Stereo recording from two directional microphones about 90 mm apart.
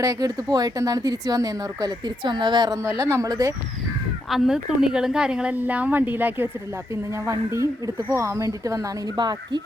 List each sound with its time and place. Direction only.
0.0 s speech: 40° right (ahead or behind)
3.0 s speech: 35° right (ahead or behind)
4.3 s a woman's voice: 5° right (ahead or behind); by 6.5 s 20° right (ahead or behind)
6.9 s speech: 35° right (ahead or behind)
9.1 s speech: 55° right (ahead or behind)